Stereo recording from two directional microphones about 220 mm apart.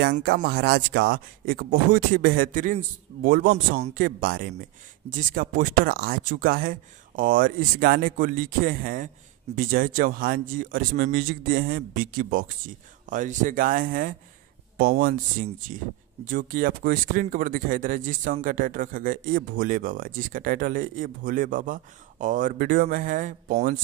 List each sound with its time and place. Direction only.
0.0 s speech: 45° right (ahead or behind)